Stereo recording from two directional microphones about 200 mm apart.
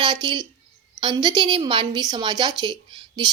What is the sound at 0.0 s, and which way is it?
A woman's voice, 20° right (ahead or behind).